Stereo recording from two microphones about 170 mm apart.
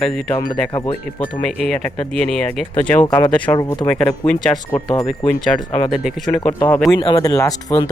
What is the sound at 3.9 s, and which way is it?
Speech, 5° left (ahead or behind).